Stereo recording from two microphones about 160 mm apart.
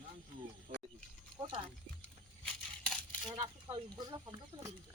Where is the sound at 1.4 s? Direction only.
35° right (ahead or behind).